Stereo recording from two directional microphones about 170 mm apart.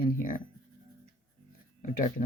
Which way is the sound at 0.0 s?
55° left (ahead or behind).